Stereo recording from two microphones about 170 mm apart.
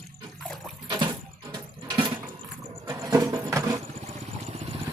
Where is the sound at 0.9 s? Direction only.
25° right (ahead or behind).